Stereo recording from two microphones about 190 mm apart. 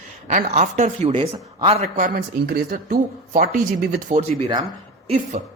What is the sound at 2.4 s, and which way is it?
Speech, 55° right (ahead or behind).